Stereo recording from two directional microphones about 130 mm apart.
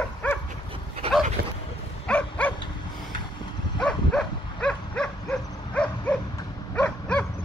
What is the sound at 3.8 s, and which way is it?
Livestock, 5° left (ahead or behind).